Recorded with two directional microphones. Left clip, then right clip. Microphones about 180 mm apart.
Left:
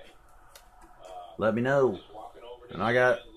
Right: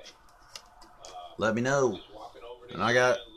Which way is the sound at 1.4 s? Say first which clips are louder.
Left 2 dB; centre (ahead or behind).